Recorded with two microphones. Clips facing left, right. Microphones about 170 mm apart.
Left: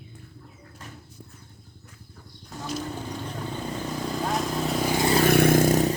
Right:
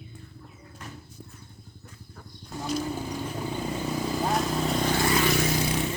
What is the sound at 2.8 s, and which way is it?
Vehicle, 10° right (ahead or behind).